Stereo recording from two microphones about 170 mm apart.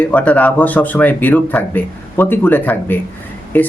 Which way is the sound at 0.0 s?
10° left (ahead or behind).